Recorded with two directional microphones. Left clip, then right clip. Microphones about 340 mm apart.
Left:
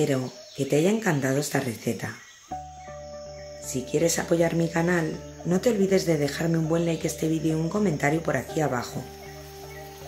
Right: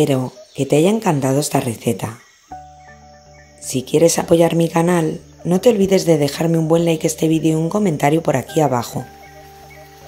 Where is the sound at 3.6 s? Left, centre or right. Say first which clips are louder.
Right 11 dB; centre.